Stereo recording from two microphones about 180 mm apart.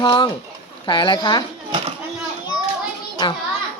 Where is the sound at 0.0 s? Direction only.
25° left (ahead or behind).